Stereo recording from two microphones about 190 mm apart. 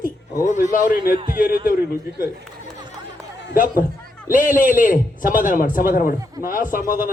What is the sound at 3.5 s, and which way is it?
A man's voice, 45° left (ahead or behind).